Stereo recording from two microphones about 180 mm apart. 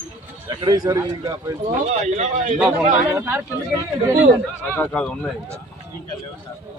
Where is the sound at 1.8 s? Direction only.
40° right (ahead or behind).